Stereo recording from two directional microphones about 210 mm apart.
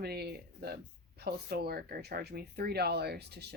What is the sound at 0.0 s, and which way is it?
Speech, 50° right (ahead or behind).